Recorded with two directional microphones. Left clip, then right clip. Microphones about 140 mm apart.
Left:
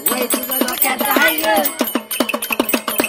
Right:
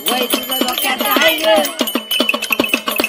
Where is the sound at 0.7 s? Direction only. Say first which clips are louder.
Right 1 dB; 20° left (ahead or behind).